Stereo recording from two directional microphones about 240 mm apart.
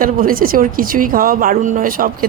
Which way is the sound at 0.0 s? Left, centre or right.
Right.